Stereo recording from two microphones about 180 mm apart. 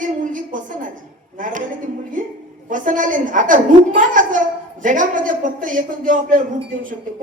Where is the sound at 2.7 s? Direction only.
45° right (ahead or behind).